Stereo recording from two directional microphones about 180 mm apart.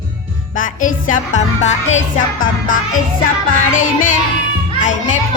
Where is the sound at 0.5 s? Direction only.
50° left (ahead or behind).